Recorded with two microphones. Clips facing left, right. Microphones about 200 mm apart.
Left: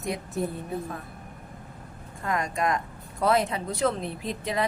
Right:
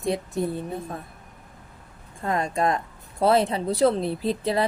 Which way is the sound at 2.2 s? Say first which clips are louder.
Right 3 dB; 30° right (ahead or behind).